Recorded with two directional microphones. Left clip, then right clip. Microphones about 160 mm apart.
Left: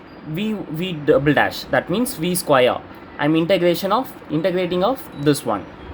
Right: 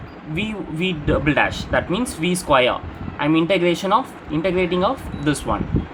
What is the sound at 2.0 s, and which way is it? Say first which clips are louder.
Speech: left 1 dB; 40° left (ahead or behind).